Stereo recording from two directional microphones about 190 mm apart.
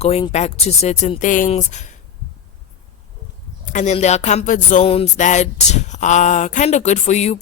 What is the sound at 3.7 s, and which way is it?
Speech, 40° left (ahead or behind).